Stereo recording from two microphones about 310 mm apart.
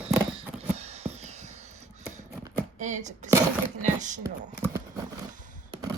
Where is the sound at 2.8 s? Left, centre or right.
Right.